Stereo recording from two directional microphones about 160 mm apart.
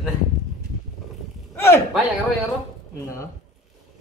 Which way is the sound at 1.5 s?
15° left (ahead or behind).